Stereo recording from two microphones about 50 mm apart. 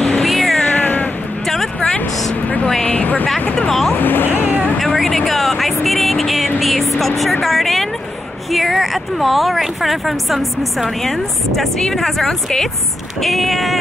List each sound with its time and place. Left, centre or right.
0.2 s cat: centre
0.6 s cat: centre
2.9 s a sound: left
3.9 s music: left
4.7 s a sound: centre
7.0 s music: centre
8.5 s speech: centre